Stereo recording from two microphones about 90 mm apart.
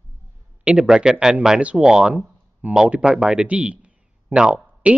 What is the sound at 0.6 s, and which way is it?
Speech, 10° right (ahead or behind).